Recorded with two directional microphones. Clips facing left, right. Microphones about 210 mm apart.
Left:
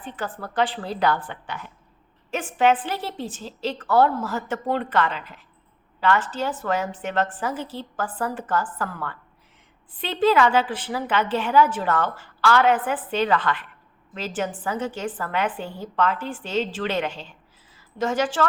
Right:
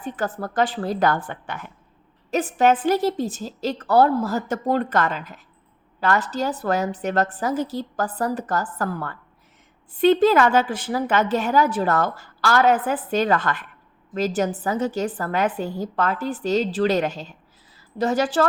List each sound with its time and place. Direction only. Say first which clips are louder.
0.0 s a woman's voice: right 5 dB; 45° right (ahead or behind)
2.3 s a woman's voice: right 2 dB; 40° right (ahead or behind)